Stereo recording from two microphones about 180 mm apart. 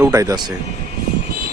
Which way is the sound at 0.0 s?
15° right (ahead or behind).